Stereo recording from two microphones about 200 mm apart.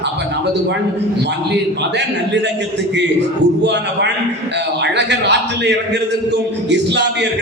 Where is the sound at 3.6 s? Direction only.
60° right (ahead or behind).